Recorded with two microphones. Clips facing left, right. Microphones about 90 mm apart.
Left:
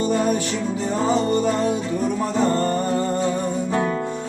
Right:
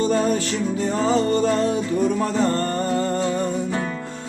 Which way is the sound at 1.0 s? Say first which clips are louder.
Even; 20° left (ahead or behind).